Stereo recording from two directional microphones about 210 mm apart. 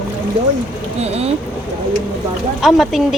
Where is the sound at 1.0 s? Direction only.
30° right (ahead or behind).